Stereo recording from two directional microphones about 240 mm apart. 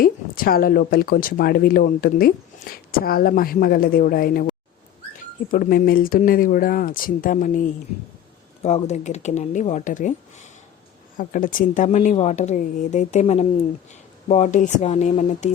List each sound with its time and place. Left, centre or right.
0.0 s speech: left
8.6 s speech: left
11.2 s speech: left